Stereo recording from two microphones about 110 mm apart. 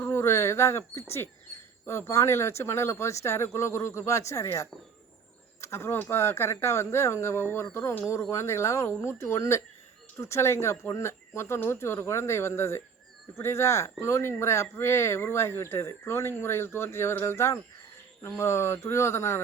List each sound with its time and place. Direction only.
0.0 s speech: 25° left (ahead or behind)